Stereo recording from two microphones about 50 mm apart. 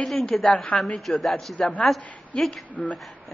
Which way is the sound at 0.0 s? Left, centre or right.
Centre.